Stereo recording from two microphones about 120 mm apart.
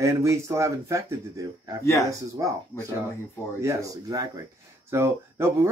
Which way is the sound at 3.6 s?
25° right (ahead or behind).